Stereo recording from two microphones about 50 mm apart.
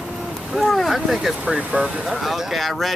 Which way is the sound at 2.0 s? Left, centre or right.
Centre.